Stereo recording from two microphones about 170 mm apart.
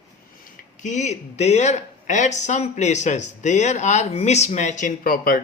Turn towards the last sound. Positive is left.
turn(degrees=55)  # may be behind; listen again after turning